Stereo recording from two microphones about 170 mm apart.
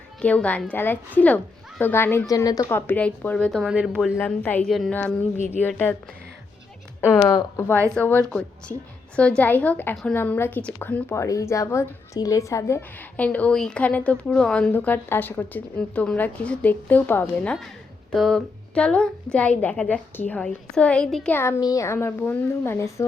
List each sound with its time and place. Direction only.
0.2 s a woman's voice: 10° left (ahead or behind)
4.2 s a woman's voice: 10° left (ahead or behind)
7.0 s a woman's voice: 15° left (ahead or behind)
7.9 s a woman's voice: 10° left (ahead or behind)
21.3 s a woman's voice: 20° left (ahead or behind)